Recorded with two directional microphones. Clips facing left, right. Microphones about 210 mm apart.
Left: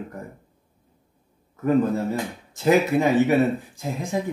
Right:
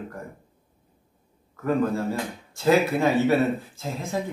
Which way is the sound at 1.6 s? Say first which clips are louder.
Left 3 dB; 20° left (ahead or behind).